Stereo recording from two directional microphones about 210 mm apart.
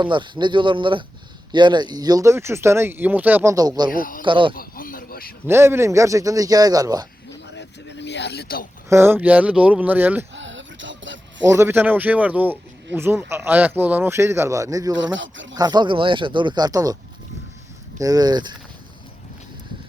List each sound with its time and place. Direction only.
0.0 s speech: 20° right (ahead or behind)
3.9 s speech: 40° left (ahead or behind)
4.2 s speech: 25° right (ahead or behind)
4.5 s a sound: 45° left (ahead or behind)
5.5 s speech: 10° right (ahead or behind)
7.3 s a sound: 55° left (ahead or behind)
8.9 s speech: 10° right (ahead or behind)
10.3 s a sound: 60° right (ahead or behind)
11.5 s speech: 10° right (ahead or behind)
15.1 s speech: 60° right (ahead or behind)
15.5 s speech: 20° right (ahead or behind)
18.0 s speech: 20° right (ahead or behind)